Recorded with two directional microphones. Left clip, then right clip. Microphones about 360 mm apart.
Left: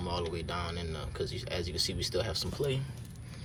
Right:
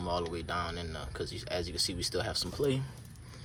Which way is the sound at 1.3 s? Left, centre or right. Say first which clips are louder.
Right 2 dB; centre.